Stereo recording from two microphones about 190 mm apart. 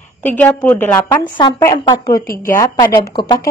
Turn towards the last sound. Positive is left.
turn(degrees=20)  # may be behind; listen again after turning